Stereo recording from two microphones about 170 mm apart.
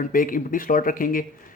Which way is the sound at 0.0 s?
55° left (ahead or behind).